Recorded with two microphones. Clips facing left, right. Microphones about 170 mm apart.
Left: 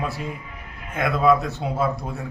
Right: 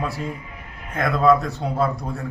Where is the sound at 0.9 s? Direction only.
Centre (ahead or behind).